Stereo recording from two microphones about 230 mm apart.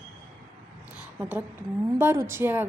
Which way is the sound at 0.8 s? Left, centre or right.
Centre.